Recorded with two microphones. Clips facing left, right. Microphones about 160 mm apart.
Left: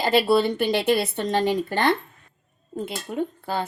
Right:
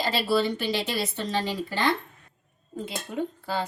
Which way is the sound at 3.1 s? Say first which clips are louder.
Left 4 dB; 60° left (ahead or behind).